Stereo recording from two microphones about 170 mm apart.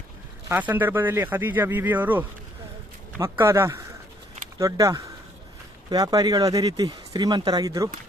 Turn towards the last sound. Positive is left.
turn(degrees=-20)  # may be behind; listen again after turning